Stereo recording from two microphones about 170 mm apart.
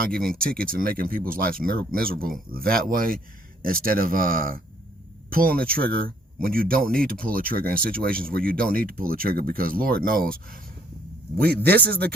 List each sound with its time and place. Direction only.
0.0 s speech: 60° right (ahead or behind)
11.3 s a man's voice: 70° right (ahead or behind)